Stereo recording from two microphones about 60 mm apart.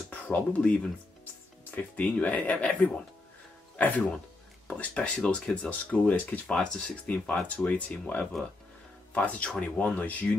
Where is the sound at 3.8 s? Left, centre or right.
Left.